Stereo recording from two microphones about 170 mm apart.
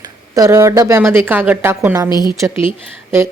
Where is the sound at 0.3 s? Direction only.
20° right (ahead or behind).